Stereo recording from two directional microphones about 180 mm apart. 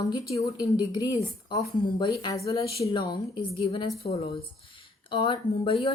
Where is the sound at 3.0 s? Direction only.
25° left (ahead or behind).